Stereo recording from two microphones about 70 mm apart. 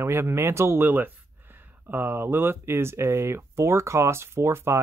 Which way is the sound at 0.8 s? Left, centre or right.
Right.